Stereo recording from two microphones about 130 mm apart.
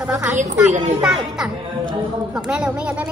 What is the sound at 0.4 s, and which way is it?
Speech, 70° right (ahead or behind).